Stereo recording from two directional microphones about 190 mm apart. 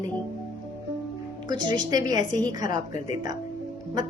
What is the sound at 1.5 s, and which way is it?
Speech, 25° right (ahead or behind).